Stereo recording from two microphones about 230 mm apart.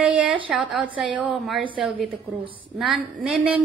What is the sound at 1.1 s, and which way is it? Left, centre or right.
A woman's voice, right.